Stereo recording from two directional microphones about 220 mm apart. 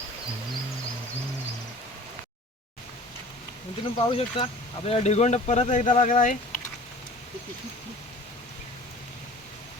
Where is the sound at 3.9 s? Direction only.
20° left (ahead or behind).